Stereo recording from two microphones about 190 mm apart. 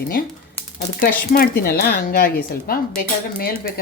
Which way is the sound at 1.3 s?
55° left (ahead or behind).